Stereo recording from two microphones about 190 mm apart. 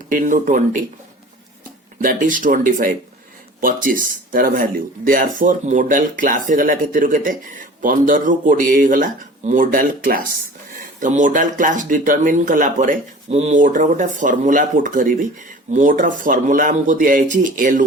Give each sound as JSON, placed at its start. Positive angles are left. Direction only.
{"t": 0.1, "sound": "speech", "side_deg": -45}
{"t": 2.0, "sound": "speech", "side_deg": -45}